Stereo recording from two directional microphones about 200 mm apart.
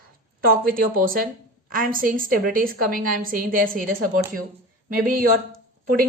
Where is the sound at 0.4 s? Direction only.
45° right (ahead or behind).